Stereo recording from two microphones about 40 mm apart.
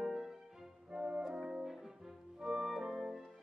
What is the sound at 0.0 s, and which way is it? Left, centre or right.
Music, centre.